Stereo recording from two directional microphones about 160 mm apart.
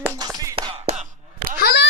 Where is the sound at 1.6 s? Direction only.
75° left (ahead or behind).